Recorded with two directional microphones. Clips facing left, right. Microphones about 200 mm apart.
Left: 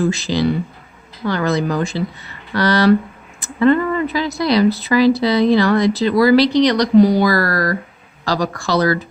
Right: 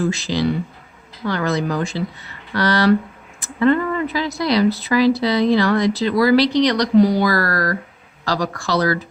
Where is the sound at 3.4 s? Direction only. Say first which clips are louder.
Left 2 dB; 30° left (ahead or behind).